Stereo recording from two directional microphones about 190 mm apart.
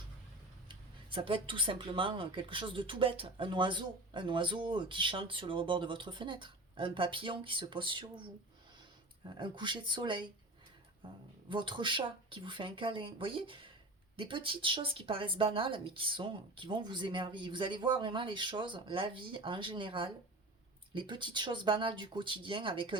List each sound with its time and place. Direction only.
0.7 s speech: 25° right (ahead or behind)
9.2 s speech: 25° right (ahead or behind)